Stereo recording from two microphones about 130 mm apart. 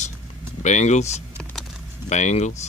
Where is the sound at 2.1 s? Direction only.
65° left (ahead or behind).